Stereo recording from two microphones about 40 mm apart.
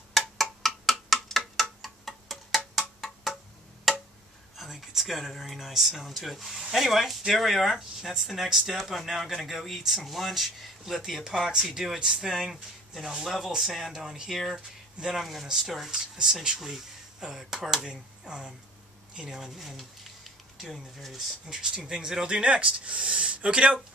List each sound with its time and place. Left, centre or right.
0.1 s a sound: centre
3.9 s tick-tock: centre
4.6 s speech: centre
13.9 s speech: centre
15.1 s speech: centre
15.9 s speech: centre
21.5 s speech: centre
22.4 s speech: right